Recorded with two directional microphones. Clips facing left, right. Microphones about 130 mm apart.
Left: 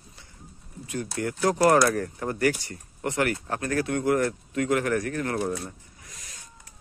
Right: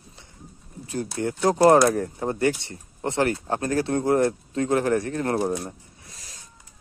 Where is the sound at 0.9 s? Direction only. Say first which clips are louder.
Right 3 dB; 30° right (ahead or behind).